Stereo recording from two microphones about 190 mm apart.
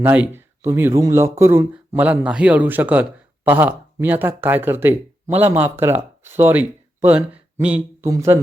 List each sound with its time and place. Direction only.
0.0 s speech: 10° right (ahead or behind)